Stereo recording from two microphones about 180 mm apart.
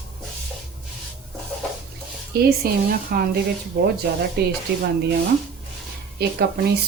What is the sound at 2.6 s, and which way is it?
Speech, 55° right (ahead or behind).